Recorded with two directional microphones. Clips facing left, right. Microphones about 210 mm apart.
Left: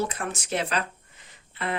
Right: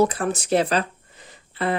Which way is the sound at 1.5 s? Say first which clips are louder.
Right 7 dB; 35° right (ahead or behind).